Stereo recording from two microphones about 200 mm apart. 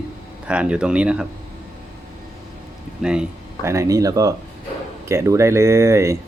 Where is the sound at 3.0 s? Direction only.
5° right (ahead or behind).